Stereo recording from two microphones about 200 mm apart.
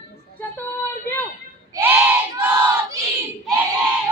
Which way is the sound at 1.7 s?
10° right (ahead or behind).